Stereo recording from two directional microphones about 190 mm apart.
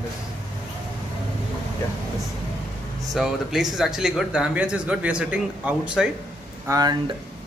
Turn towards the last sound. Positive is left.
turn(degrees=-20)  # may be behind; listen again after turning